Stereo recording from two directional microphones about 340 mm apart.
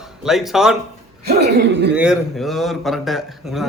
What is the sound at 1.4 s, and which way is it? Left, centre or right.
Speech, right.